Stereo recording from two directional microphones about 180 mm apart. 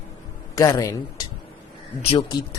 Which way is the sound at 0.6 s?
20° left (ahead or behind).